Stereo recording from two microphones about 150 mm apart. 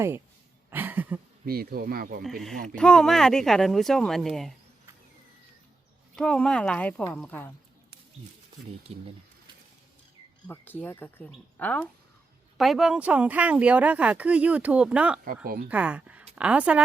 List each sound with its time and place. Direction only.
0.7 s a sound: 15° right (ahead or behind)
1.5 s speech: 90° right
2.2 s speech: centre (ahead or behind)
6.1 s a woman's voice: 5° left (ahead or behind)
8.9 s speech: 40° right (ahead or behind)
10.4 s a woman's voice: 10° left (ahead or behind); by 16.8 s 10° right (ahead or behind)